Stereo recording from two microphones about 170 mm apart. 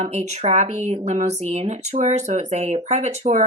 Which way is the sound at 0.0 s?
40° right (ahead or behind).